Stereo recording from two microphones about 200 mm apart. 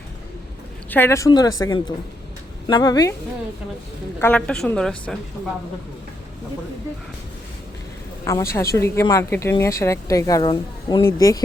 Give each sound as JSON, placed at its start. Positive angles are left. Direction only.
{"t": 0.9, "sound": "speech", "side_deg": 10}
{"t": 4.2, "sound": "a woman's voice", "side_deg": 5}
{"t": 8.3, "sound": "speech", "side_deg": 15}